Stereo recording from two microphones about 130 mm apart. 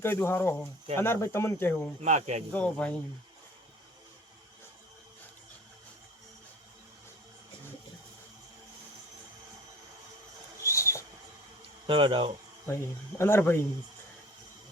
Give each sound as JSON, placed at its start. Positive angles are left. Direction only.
{"t": 0.0, "sound": "speech", "side_deg": 20}
{"t": 2.0, "sound": "speech", "side_deg": -60}
{"t": 2.5, "sound": "speech", "side_deg": 10}
{"t": 10.6, "sound": "rodents", "side_deg": 20}
{"t": 11.9, "sound": "speech", "side_deg": -40}
{"t": 12.6, "sound": "speech", "side_deg": 20}